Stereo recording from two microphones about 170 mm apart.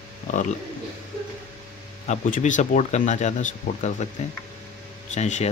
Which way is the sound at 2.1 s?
45° left (ahead or behind).